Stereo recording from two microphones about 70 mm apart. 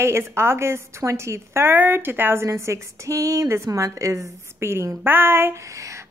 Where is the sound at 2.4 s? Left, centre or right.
Right.